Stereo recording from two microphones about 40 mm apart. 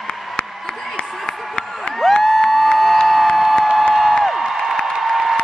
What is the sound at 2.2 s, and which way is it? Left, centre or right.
Crowd, centre.